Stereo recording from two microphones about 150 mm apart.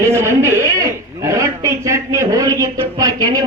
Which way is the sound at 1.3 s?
20° right (ahead or behind).